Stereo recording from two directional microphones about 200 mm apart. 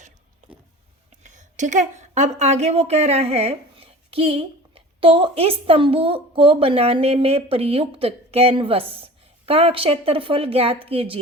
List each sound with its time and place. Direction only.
1.2 s a woman's voice: 35° right (ahead or behind)